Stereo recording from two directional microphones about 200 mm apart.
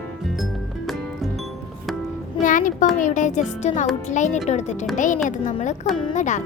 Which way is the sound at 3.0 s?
40° left (ahead or behind).